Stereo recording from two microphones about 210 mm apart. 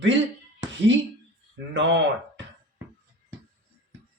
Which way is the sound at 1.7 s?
55° right (ahead or behind).